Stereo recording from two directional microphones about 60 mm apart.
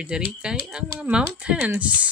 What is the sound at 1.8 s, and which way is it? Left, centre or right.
Speech, right.